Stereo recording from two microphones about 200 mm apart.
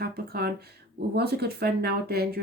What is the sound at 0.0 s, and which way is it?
Speech, 50° right (ahead or behind).